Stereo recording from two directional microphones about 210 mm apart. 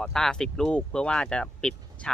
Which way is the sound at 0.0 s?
5° left (ahead or behind).